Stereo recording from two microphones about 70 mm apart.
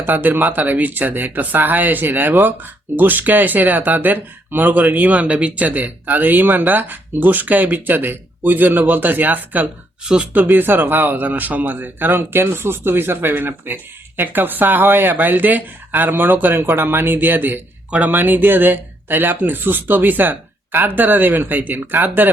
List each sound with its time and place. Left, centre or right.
0.0 s speech: right